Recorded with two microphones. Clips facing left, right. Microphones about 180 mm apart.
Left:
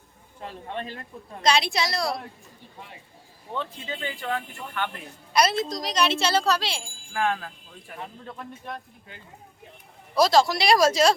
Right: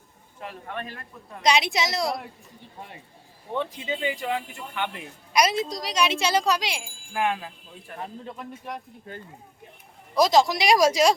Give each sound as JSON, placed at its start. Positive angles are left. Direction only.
{"t": 0.4, "sound": "a man's voice", "side_deg": 25}
{"t": 1.4, "sound": "a woman's voice", "side_deg": -20}
{"t": 3.5, "sound": "speech", "side_deg": -15}
{"t": 7.9, "sound": "a man's voice", "side_deg": 5}
{"t": 8.3, "sound": "speech", "side_deg": -10}
{"t": 10.2, "sound": "speech", "side_deg": -15}